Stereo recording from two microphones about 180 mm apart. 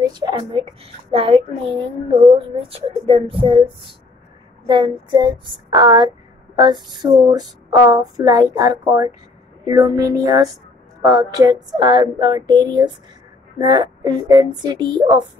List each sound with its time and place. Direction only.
0.0 s speech: 25° right (ahead or behind)
4.6 s speech: 25° right (ahead or behind)